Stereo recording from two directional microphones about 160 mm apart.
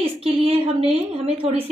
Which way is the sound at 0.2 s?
35° right (ahead or behind).